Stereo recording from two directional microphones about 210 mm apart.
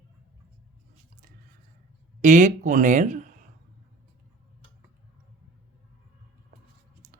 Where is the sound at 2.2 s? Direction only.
35° right (ahead or behind).